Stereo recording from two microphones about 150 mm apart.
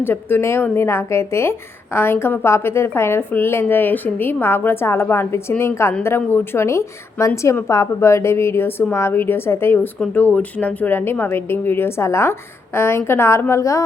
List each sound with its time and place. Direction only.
0.0 s a woman's voice: 15° left (ahead or behind)